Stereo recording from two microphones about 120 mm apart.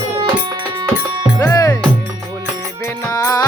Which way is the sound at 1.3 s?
25° left (ahead or behind).